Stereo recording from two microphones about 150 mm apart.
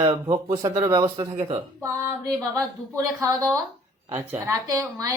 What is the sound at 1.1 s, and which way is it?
Speech, 35° right (ahead or behind).